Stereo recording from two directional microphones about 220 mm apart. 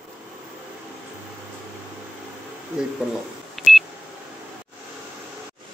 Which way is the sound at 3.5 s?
Centre (ahead or behind).